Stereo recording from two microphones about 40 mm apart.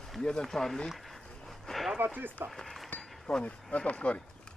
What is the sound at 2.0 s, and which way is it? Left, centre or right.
Speech, right.